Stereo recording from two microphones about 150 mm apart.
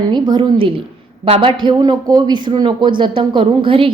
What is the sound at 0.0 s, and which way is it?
A woman's voice, 30° right (ahead or behind).